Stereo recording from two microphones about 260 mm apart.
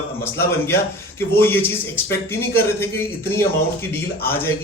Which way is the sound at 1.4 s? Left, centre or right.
Centre.